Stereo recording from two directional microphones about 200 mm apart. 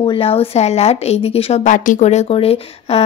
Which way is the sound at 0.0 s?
30° left (ahead or behind).